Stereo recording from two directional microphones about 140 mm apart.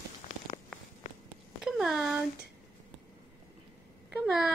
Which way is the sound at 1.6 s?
Centre (ahead or behind).